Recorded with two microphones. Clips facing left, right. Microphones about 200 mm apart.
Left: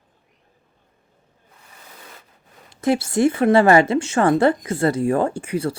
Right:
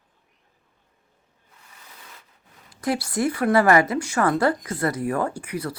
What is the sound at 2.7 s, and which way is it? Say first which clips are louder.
Speech: left 6 dB; 25° left (ahead or behind).